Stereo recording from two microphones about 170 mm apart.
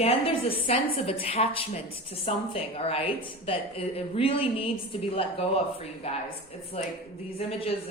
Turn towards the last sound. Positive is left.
turn(degrees=35)  # may be behind; listen again after turning